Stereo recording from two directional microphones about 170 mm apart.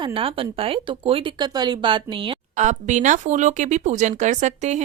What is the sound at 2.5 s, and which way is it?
Speech, 45° right (ahead or behind).